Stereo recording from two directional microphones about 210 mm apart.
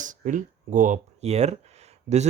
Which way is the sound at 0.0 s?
35° right (ahead or behind).